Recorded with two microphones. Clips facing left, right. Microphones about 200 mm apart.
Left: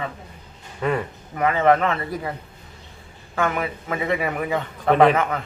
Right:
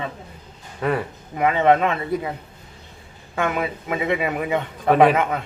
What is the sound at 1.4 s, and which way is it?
Speech, 20° right (ahead or behind).